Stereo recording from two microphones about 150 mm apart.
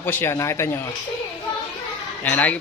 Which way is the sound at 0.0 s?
15° left (ahead or behind).